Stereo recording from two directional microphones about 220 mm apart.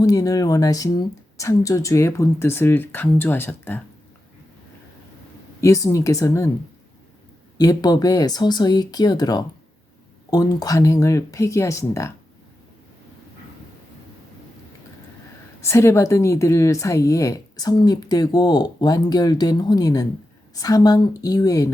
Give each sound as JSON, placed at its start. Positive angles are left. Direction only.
{"t": 0.0, "sound": "a woman's voice", "side_deg": 15}
{"t": 5.5, "sound": "a woman's voice", "side_deg": 15}
{"t": 7.6, "sound": "a woman's voice", "side_deg": 15}
{"t": 15.6, "sound": "a woman's voice", "side_deg": 10}